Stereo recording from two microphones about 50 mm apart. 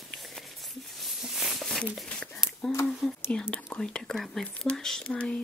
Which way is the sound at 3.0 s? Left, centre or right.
Centre.